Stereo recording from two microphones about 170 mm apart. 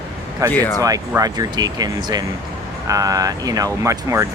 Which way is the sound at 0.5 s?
10° left (ahead or behind).